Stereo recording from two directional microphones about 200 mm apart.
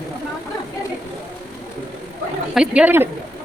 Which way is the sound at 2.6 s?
5° right (ahead or behind).